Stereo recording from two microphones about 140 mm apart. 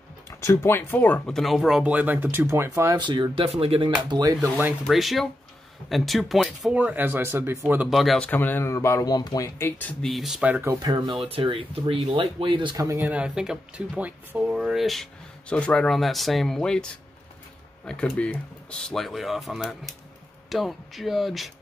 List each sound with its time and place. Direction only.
0.3 s speech: 20° left (ahead or behind); by 3.0 s 20° right (ahead or behind)
3.0 s speech: 35° right (ahead or behind)
4.1 s speech: 25° right (ahead or behind)
4.8 s speech: centre (ahead or behind)
6.8 s speech: 10° right (ahead or behind)
7.9 s speech: centre (ahead or behind)
8.3 s speech: 15° left (ahead or behind)
9.6 s speech: 15° left (ahead or behind)
10.0 s speech: centre (ahead or behind)
10.7 s speech: 30° right (ahead or behind)
13.0 s speech: 10° right (ahead or behind)
17.8 s speech: 5° left (ahead or behind)